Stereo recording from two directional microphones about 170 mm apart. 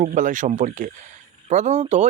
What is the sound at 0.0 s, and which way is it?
Speech, 50° right (ahead or behind).